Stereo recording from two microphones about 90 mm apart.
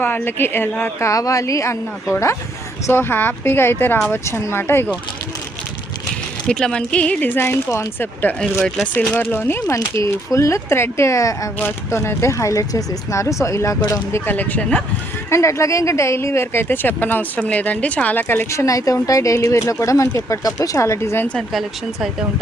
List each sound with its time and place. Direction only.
0.0 s speech: 25° left (ahead or behind)
2.8 s speech: 25° left (ahead or behind)
6.5 s speech: 10° left (ahead or behind)
7.3 s speech: 25° left (ahead or behind)
8.3 s speech: 15° left (ahead or behind)
9.6 s speech: 35° left (ahead or behind)
14.3 s speech: 20° left (ahead or behind)
15.3 s speech: 35° left (ahead or behind)
18.6 s speech: 40° left (ahead or behind)